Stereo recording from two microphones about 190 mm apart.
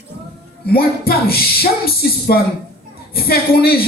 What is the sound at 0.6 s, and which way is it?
Speech, 55° left (ahead or behind).